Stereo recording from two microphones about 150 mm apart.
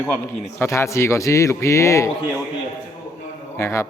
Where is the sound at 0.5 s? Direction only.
20° left (ahead or behind).